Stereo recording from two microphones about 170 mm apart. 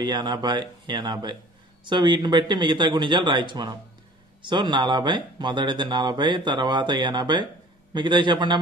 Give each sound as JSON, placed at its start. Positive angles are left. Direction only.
{"t": 0.0, "sound": "speech", "side_deg": -25}